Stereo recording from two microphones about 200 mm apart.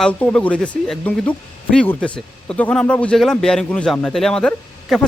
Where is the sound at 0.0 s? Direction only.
5° left (ahead or behind).